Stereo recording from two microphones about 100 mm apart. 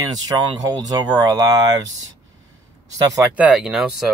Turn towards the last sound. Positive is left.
turn(degrees=-5)  # may be behind; listen again after turning